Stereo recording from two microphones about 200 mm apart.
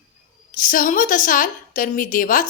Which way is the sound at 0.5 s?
40° left (ahead or behind).